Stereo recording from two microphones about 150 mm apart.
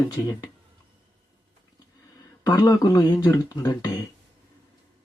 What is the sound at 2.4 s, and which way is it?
Speech, 25° left (ahead or behind).